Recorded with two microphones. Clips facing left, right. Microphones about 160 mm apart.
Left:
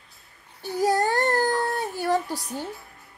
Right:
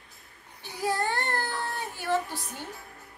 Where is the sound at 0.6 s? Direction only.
40° left (ahead or behind).